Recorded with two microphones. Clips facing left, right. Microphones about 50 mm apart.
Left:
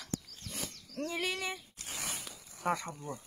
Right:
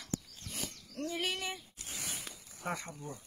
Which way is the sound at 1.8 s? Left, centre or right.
Left.